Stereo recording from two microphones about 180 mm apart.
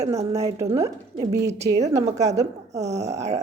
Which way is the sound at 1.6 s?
35° right (ahead or behind).